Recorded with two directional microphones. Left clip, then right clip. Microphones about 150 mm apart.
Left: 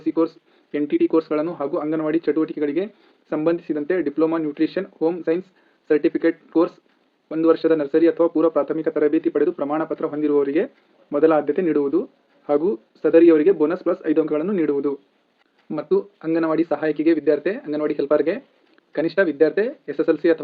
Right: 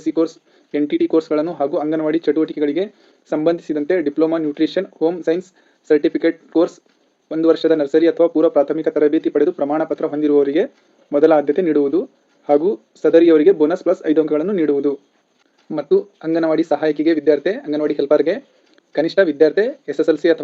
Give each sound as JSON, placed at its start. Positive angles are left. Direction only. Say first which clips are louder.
{"t": 0.0, "sound": "speech", "louder": "right 3 dB", "side_deg": -30}